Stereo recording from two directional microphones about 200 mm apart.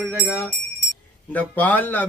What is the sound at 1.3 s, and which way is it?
Music, 10° left (ahead or behind).